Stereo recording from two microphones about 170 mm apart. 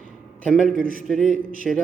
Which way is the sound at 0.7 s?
55° right (ahead or behind).